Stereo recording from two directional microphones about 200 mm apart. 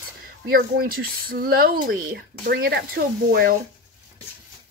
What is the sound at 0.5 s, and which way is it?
A woman's voice, 50° right (ahead or behind).